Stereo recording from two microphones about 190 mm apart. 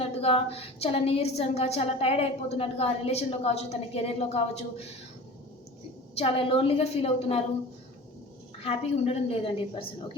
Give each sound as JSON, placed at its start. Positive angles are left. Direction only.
{"t": 0.0, "sound": "a woman's voice", "side_deg": 30}
{"t": 6.1, "sound": "a woman's voice", "side_deg": 30}
{"t": 8.6, "sound": "a woman's voice", "side_deg": 30}